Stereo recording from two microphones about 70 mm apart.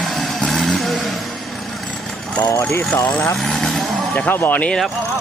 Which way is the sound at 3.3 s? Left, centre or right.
Centre.